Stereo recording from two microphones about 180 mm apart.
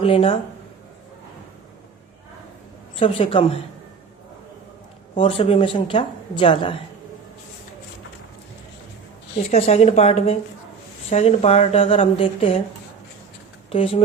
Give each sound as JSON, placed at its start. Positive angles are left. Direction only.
{"t": 0.0, "sound": "a woman's voice", "side_deg": 30}
{"t": 3.0, "sound": "a woman's voice", "side_deg": 30}
{"t": 5.1, "sound": "speech", "side_deg": 30}
{"t": 9.5, "sound": "a woman's voice", "side_deg": 35}
{"t": 13.7, "sound": "speech", "side_deg": 30}